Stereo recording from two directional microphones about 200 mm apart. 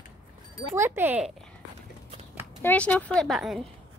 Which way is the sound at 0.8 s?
10° right (ahead or behind).